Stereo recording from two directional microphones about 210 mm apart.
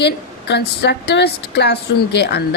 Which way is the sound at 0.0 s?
55° left (ahead or behind).